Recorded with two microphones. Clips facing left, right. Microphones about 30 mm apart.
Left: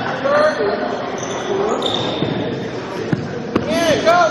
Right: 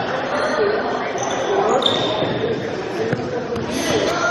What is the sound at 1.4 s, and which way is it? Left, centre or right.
Basketball bounce, centre.